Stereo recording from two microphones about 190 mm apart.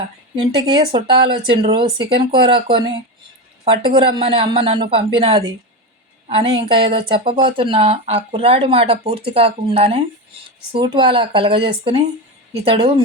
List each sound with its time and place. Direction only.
0.3 s speech: 25° right (ahead or behind)